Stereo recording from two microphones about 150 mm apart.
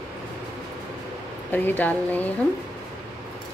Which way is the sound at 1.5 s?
10° left (ahead or behind).